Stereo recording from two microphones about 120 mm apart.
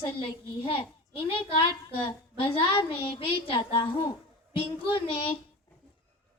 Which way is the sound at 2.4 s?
45° left (ahead or behind).